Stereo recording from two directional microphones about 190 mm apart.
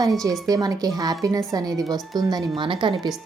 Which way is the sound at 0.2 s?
20° right (ahead or behind).